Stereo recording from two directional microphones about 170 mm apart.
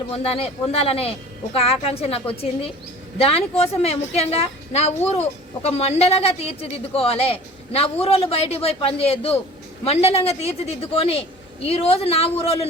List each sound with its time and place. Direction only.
0.1 s a woman's voice: 35° left (ahead or behind)